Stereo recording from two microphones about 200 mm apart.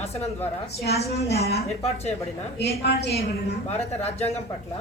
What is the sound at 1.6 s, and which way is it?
Speech, 30° left (ahead or behind).